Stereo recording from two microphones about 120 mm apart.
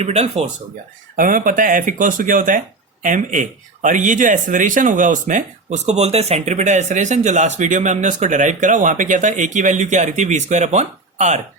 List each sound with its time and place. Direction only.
0.0 s speech: 65° right (ahead or behind)
1.5 s speech: 90° right